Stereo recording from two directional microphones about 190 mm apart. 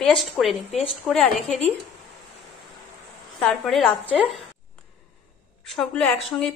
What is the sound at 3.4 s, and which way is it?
A woman's voice, centre (ahead or behind).